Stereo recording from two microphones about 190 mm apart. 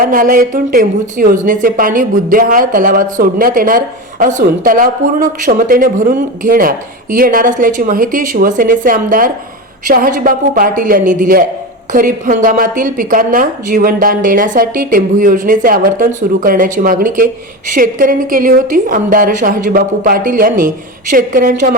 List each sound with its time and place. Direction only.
0.0 s a woman's voice: 45° right (ahead or behind)